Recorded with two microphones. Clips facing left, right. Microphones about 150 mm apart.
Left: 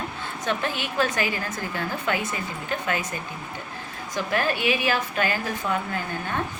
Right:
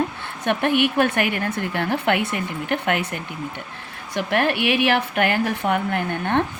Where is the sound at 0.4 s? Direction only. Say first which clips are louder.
Right 9 dB; 65° right (ahead or behind).